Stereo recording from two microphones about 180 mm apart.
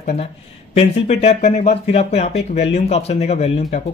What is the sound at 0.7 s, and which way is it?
Speech, 40° left (ahead or behind).